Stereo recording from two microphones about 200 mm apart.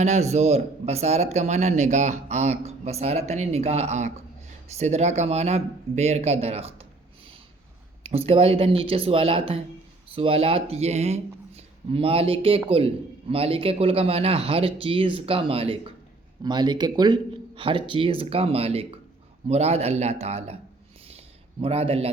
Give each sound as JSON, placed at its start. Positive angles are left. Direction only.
{"t": 0.0, "sound": "speech", "side_deg": -35}
{"t": 8.0, "sound": "speech", "side_deg": -30}
{"t": 21.6, "sound": "speech", "side_deg": -30}